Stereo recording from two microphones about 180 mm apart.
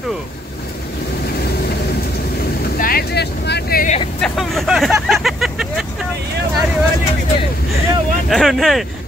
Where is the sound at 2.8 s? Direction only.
55° left (ahead or behind).